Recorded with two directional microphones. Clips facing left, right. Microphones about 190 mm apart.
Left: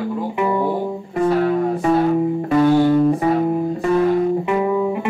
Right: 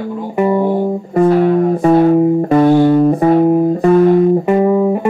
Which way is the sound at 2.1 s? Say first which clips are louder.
Right 6 dB; 40° right (ahead or behind).